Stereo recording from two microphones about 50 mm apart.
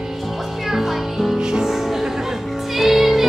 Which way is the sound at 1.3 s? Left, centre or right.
Centre.